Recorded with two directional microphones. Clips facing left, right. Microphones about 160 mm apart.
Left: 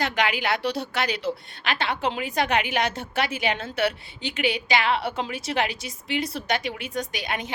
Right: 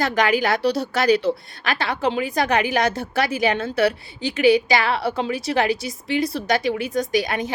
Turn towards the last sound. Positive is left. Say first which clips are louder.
# right 9 dB
turn(degrees=-40)  # may be behind; listen again after turning